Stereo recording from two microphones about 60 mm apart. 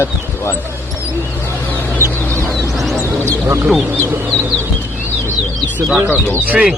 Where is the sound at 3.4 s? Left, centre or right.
Right.